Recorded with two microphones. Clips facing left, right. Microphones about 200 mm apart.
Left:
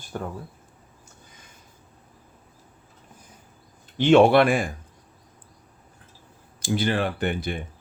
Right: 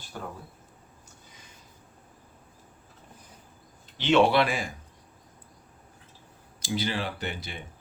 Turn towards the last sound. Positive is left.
turn(degrees=55)  # may be behind; listen again after turning